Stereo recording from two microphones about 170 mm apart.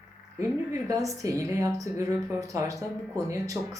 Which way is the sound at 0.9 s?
20° right (ahead or behind).